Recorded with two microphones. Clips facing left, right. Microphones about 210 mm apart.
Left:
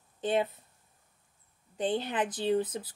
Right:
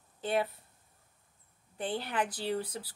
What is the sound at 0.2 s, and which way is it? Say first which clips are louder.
Speech: left 3 dB; 20° left (ahead or behind).